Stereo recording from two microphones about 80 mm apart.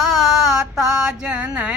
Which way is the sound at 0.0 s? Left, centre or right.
Centre.